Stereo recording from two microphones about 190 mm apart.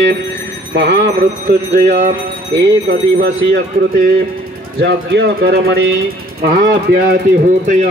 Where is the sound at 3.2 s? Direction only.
55° right (ahead or behind).